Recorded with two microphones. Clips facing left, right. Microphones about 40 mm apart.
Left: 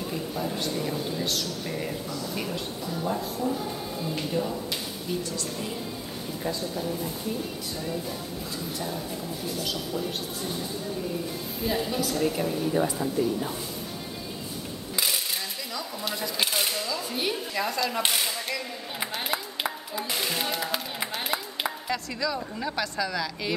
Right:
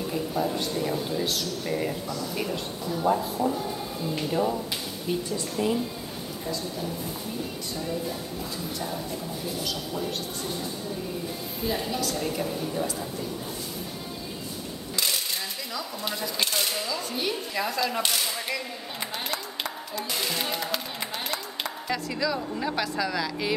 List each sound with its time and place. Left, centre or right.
0.1 s speech: centre
8.7 s speech: centre
12.7 s speech: centre
15.0 s ratchet: centre
15.7 s speech: centre
16.3 s chopping: centre
16.7 s speech: centre
17.0 s speech: centre
18.0 s speech: centre
18.9 s a sound: centre
20.0 s music: centre
21.8 s speech: centre